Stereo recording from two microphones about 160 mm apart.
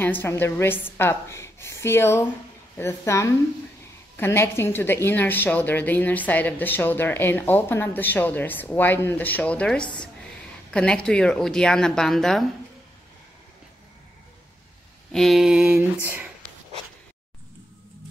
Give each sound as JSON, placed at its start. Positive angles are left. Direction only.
{"t": 0.0, "sound": "a woman's voice", "side_deg": 10}
{"t": 15.1, "sound": "a woman's voice", "side_deg": 0}